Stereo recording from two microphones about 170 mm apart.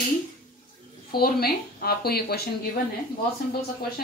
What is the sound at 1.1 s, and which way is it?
A woman's voice, 65° left (ahead or behind).